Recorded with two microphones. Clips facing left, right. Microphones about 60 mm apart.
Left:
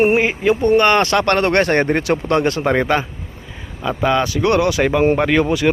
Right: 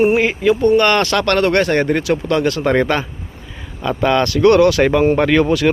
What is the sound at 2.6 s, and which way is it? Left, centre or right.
Speech, centre.